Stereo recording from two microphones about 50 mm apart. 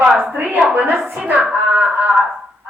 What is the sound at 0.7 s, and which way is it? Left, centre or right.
Speech, right.